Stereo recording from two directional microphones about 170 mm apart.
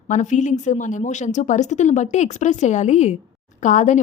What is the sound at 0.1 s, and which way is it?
A woman's voice, 45° left (ahead or behind).